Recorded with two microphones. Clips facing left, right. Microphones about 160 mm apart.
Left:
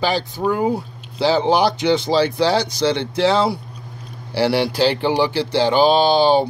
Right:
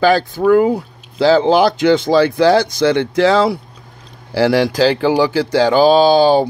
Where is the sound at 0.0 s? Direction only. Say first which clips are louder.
Right 7 dB; 65° right (ahead or behind).